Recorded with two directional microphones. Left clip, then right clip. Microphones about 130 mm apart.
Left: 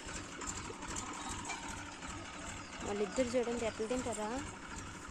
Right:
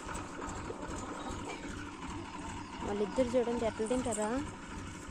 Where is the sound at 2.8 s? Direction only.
30° left (ahead or behind).